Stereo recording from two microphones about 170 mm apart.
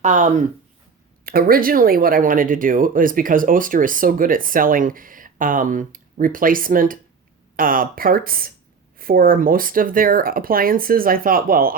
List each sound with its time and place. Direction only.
0.0 s speech: 45° right (ahead or behind)
1.2 s speech: 60° right (ahead or behind)